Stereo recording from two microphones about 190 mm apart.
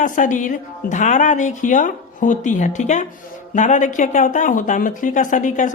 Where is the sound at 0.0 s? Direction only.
45° left (ahead or behind).